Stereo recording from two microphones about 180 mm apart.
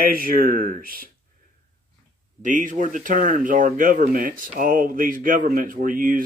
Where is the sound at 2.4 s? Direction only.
45° right (ahead or behind).